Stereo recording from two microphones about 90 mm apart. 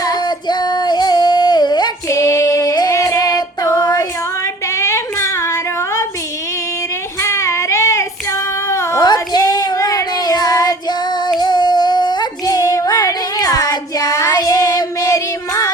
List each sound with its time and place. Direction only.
0.0 s female singing: 50° left (ahead or behind)
2.0 s female singing: 35° left (ahead or behind)
4.7 s a sound: 30° left (ahead or behind)
7.2 s child singing: 30° left (ahead or behind)
9.0 s child singing: 45° left (ahead or behind)